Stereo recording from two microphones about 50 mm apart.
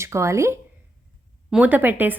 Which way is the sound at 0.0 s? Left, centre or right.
Right.